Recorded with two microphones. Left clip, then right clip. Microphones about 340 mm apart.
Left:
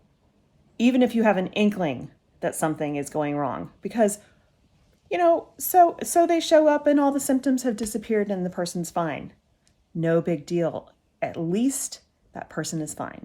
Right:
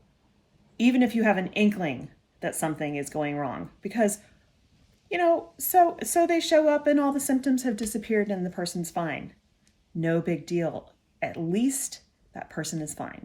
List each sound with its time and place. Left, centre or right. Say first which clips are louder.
0.8 s a woman's voice: left 3 dB; centre